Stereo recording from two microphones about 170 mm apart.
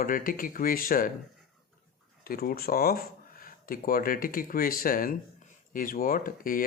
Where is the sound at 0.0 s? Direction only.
55° left (ahead or behind).